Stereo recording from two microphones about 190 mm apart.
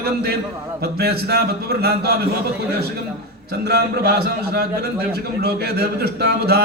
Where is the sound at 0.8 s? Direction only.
55° right (ahead or behind).